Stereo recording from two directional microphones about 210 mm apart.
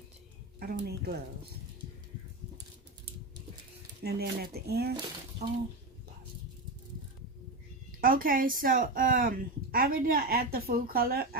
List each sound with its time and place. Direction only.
0.6 s a woman's voice: 50° right (ahead or behind)
4.0 s a woman's voice: 50° right (ahead or behind)
8.0 s a woman's voice: 40° right (ahead or behind)